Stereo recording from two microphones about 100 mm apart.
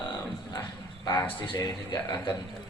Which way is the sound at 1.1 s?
20° left (ahead or behind).